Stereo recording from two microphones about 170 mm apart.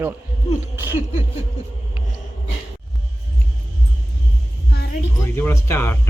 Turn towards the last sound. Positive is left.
turn(degrees=15)  # may be behind; listen again after turning